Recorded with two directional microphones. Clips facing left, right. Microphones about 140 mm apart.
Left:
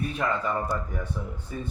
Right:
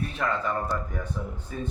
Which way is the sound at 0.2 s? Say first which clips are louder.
Even; 20° left (ahead or behind).